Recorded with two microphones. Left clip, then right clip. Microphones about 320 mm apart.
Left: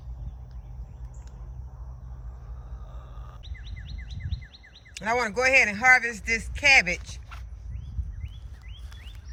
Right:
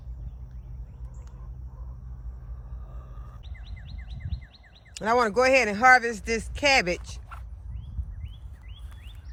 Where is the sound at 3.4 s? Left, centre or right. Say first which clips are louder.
Left 5 dB; right.